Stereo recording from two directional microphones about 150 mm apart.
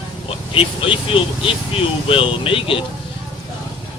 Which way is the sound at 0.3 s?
40° left (ahead or behind).